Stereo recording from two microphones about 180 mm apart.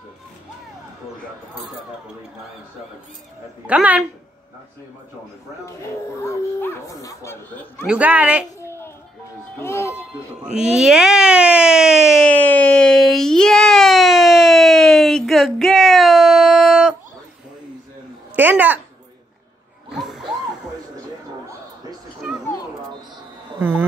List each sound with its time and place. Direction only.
3.6 s speech: 10° right (ahead or behind)
6.2 s speech: 15° left (ahead or behind)
7.8 s speech: 5° right (ahead or behind)
8.5 s a sound: 15° left (ahead or behind)
9.6 s speech: 15° left (ahead or behind)
9.9 s speech: 5° right (ahead or behind)
12.3 s baby cry: 10° left (ahead or behind)
18.3 s speech: 10° right (ahead or behind)
19.9 s a sound: centre (ahead or behind)
22.4 s children playing: 15° left (ahead or behind)